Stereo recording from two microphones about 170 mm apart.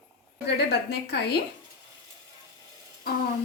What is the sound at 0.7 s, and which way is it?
Speech, 75° left (ahead or behind).